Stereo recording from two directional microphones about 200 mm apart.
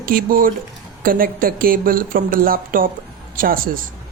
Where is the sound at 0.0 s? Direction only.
45° right (ahead or behind).